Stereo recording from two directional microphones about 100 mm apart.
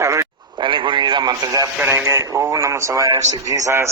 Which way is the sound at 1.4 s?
35° right (ahead or behind).